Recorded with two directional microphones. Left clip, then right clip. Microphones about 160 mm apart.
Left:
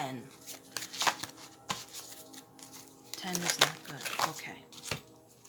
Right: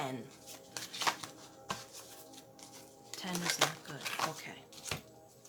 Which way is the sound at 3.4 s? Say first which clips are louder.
Left 4 dB; 40° left (ahead or behind).